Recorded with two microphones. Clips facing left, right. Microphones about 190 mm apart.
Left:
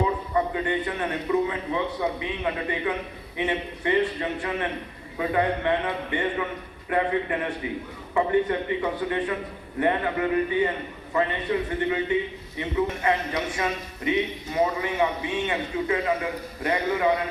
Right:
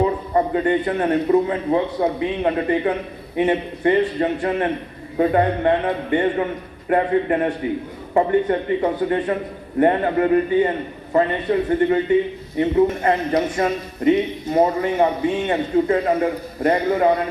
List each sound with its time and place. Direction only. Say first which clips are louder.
0.3 s speech: right 8 dB; 45° right (ahead or behind)